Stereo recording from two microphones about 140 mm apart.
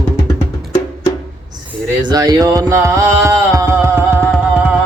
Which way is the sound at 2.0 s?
30° right (ahead or behind).